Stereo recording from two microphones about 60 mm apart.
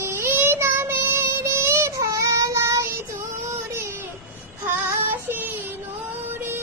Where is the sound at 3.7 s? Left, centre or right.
Right.